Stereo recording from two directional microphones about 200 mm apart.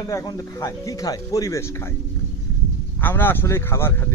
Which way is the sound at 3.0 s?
10° left (ahead or behind).